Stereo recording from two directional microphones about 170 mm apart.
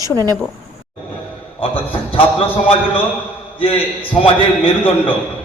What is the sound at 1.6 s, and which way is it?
Speech, 30° left (ahead or behind).